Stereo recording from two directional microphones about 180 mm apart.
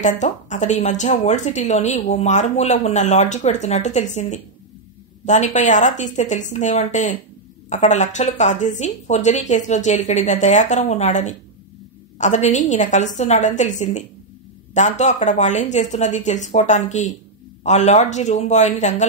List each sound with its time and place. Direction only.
0.0 s a woman's voice: 40° left (ahead or behind)